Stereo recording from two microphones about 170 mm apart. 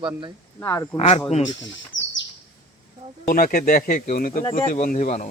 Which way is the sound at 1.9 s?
90° left.